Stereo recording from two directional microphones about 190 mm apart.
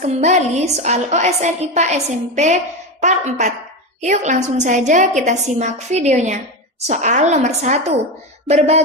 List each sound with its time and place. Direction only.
0.0 s a woman's voice: 35° right (ahead or behind)